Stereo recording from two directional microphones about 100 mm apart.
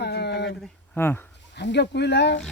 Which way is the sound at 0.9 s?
20° left (ahead or behind).